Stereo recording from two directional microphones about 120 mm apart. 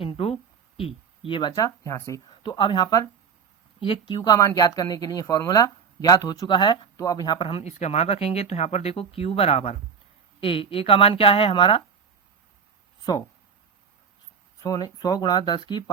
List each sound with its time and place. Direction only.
0.0 s a sound: 50° left (ahead or behind)
0.8 s speech: 50° left (ahead or behind); by 2.2 s 25° left (ahead or behind)
2.4 s speech: 40° left (ahead or behind)
3.8 s speech: 45° left (ahead or behind)
4.4 s speech: 30° left (ahead or behind); by 7.7 s 50° left (ahead or behind)
7.7 s speech: 65° left (ahead or behind); by 11.8 s 45° left (ahead or behind)
13.0 s speech: 35° left (ahead or behind)
14.6 s speech: 30° left (ahead or behind)